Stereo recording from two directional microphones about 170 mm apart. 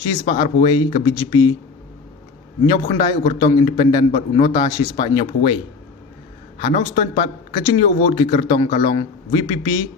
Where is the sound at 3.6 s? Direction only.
30° left (ahead or behind).